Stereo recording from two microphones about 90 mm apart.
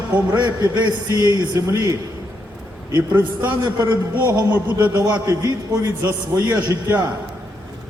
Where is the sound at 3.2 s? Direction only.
20° right (ahead or behind).